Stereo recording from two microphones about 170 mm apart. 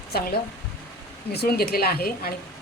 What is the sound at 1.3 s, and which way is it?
Speech, 65° left (ahead or behind).